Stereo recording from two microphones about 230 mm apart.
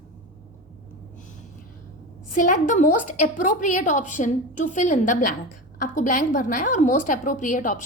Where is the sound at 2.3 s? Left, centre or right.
Left.